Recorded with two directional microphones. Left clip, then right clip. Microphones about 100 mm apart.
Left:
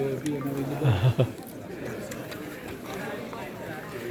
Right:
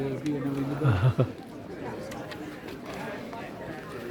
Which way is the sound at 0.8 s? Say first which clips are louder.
Left 2 dB; 40° right (ahead or behind).